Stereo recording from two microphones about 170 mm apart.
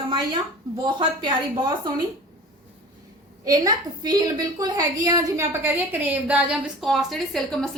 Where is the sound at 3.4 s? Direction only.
20° right (ahead or behind); by 7.7 s centre (ahead or behind).